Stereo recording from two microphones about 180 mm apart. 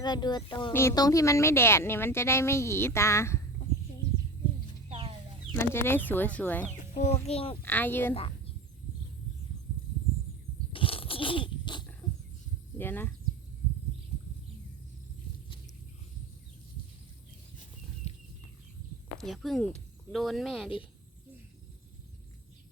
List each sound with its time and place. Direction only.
0.0 s speech: 25° left (ahead or behind)
0.7 s speech: 15° left (ahead or behind)
4.9 s chicken: 30° right (ahead or behind)
5.7 s speech: 15° left (ahead or behind)
6.7 s speech: 40° left (ahead or behind)
7.6 s speech: 10° left (ahead or behind)
10.7 s roaring cats: 30° left (ahead or behind)
12.7 s speech: 10° left (ahead or behind)
18.0 s a sound: 35° left (ahead or behind)
19.1 s speech: centre (ahead or behind)